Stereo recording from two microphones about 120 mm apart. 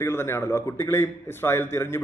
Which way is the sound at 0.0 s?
20° left (ahead or behind).